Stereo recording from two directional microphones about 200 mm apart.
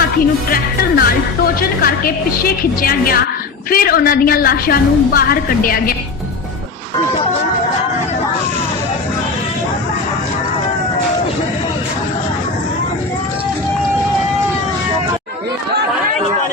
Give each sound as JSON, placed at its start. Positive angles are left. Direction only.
{"t": 0.5, "sound": "a woman's voice", "side_deg": 50}